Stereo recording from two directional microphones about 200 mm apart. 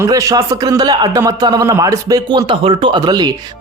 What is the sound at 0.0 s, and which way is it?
A man's voice, 15° right (ahead or behind).